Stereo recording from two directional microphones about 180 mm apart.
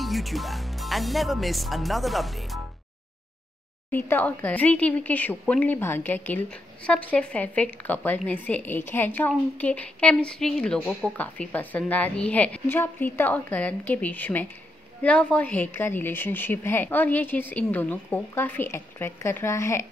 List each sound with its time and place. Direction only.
0.0 s speech: centre (ahead or behind)
3.9 s a woman's voice: 10° left (ahead or behind)